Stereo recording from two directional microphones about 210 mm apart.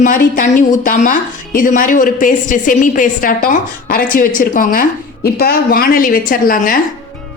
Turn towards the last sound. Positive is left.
turn(degrees=40)  # may be behind; listen again after turning